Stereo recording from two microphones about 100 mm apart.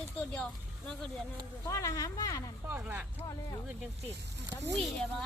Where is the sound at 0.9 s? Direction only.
5° left (ahead or behind).